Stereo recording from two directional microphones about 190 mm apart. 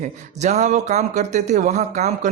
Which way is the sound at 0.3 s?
35° right (ahead or behind).